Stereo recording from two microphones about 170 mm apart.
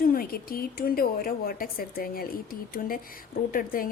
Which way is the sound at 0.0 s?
60° left (ahead or behind).